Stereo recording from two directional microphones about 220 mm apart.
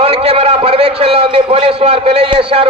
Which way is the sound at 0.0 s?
25° right (ahead or behind).